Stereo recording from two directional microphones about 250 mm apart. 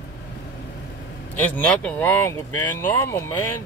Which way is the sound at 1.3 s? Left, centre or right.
Centre.